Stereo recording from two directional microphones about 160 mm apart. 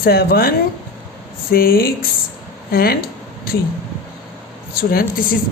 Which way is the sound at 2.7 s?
70° left (ahead or behind).